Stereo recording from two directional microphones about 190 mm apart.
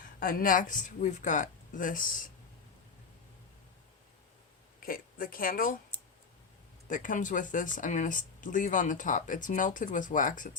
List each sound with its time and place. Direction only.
0.2 s speech: 50° left (ahead or behind)
4.8 s speech: 50° left (ahead or behind)
5.9 s clicking: 5° left (ahead or behind)
6.8 s speech: 45° left (ahead or behind)